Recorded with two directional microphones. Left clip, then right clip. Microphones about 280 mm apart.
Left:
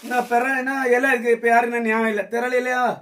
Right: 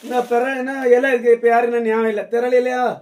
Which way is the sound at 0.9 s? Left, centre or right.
Centre.